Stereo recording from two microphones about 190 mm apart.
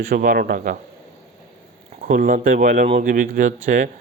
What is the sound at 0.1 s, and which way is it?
Speech, 50° right (ahead or behind).